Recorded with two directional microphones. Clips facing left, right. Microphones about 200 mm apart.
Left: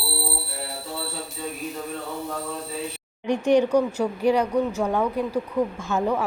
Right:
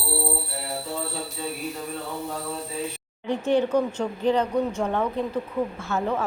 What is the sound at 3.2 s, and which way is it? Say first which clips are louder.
A woman's voice: left 3 dB; 15° left (ahead or behind).